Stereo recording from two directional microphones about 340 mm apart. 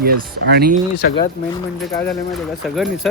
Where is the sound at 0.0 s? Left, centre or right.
Right.